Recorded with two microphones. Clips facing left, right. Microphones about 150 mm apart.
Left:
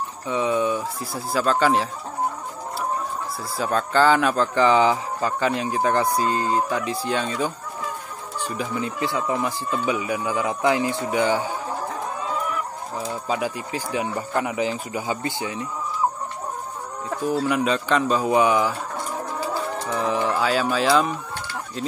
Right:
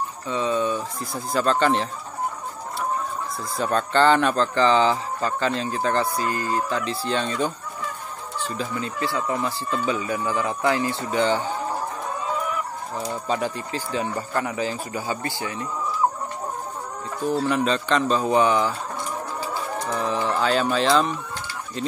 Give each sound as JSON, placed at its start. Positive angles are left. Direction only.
{"t": 0.3, "sound": "speech", "side_deg": 15}
{"t": 3.5, "sound": "speech", "side_deg": 5}
{"t": 12.9, "sound": "speech", "side_deg": 5}
{"t": 17.2, "sound": "speech", "side_deg": 10}
{"t": 19.9, "sound": "speech", "side_deg": 15}